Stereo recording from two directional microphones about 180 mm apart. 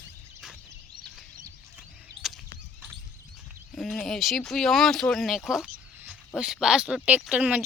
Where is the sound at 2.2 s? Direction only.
30° right (ahead or behind).